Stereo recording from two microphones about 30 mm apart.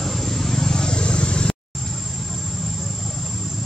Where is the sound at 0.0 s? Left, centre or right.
Centre; by 1.5 s left.